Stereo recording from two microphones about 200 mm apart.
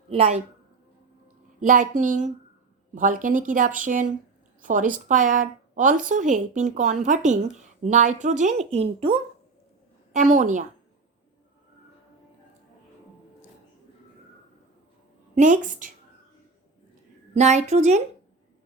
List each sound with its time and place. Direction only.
0.1 s a woman's voice: 30° right (ahead or behind)
1.6 s a woman's voice: 40° right (ahead or behind)
15.4 s a woman's voice: 40° right (ahead or behind)
17.3 s a woman's voice: 35° right (ahead or behind)